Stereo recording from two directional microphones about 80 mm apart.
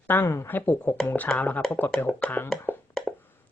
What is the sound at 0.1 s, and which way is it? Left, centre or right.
Speech, left.